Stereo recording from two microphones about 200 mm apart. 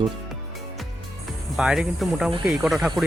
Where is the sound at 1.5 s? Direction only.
5° right (ahead or behind).